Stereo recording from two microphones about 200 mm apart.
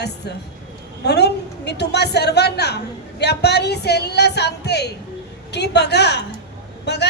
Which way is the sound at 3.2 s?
55° left (ahead or behind).